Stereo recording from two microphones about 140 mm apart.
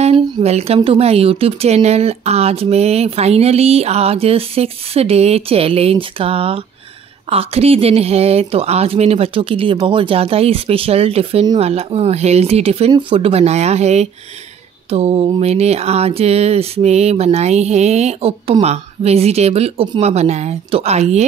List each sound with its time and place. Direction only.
0.0 s speech: 50° right (ahead or behind)